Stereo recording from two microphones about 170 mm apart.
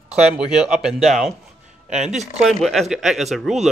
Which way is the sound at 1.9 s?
40° right (ahead or behind).